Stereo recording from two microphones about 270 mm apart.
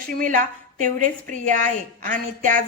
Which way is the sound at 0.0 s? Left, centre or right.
Right.